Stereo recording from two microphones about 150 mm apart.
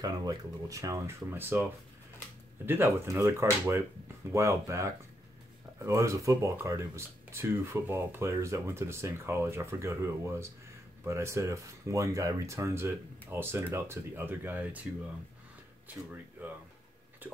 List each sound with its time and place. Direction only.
0.0 s speech: 25° right (ahead or behind)